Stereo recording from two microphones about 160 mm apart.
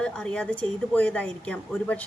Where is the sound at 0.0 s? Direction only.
5° left (ahead or behind).